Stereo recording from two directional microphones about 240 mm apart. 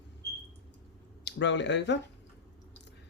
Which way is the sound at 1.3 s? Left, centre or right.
Left.